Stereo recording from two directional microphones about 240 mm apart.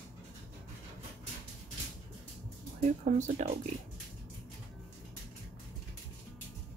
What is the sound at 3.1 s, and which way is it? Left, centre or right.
Speech, right.